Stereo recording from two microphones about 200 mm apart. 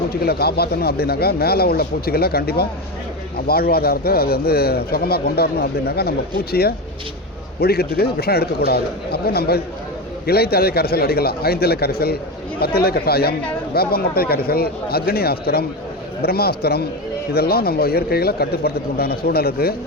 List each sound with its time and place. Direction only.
0.1 s speech: 50° left (ahead or behind)